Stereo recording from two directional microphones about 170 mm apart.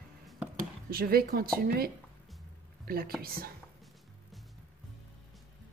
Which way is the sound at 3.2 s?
60° right (ahead or behind).